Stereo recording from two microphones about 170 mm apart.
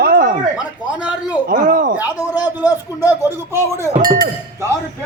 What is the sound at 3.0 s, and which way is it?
Speech, 15° right (ahead or behind).